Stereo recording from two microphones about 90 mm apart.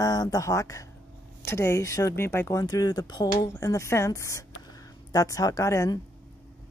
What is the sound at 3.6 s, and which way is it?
Speech, 35° left (ahead or behind).